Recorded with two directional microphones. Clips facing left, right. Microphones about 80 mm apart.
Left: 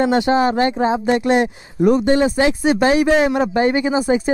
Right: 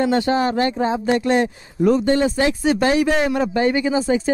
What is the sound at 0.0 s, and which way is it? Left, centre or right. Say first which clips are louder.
Speech: left 3 dB; left.